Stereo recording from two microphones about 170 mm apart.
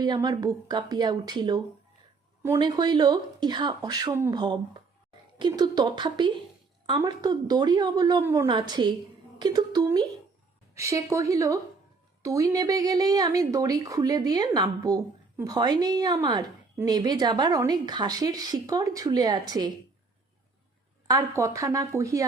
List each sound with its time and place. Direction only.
0.0 s speech: 25° right (ahead or behind)
21.1 s speech: 20° right (ahead or behind)